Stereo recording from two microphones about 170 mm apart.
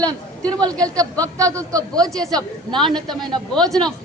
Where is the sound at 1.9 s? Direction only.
5° left (ahead or behind).